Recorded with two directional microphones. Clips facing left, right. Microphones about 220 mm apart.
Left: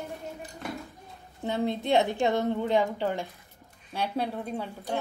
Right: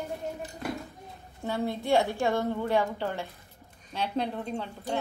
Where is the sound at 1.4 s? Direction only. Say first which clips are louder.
Left 1 dB; 20° left (ahead or behind).